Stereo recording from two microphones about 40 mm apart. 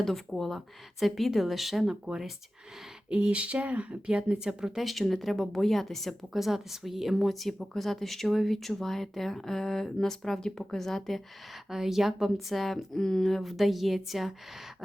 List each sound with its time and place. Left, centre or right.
0.0 s a woman's voice: centre
3.1 s speech: right
4.4 s speech: centre
4.8 s a woman's voice: centre
11.7 s a woman's voice: centre